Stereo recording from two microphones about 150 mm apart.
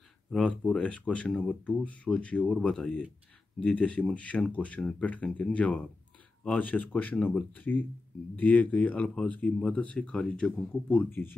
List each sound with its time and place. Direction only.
0.3 s speech: 5° left (ahead or behind)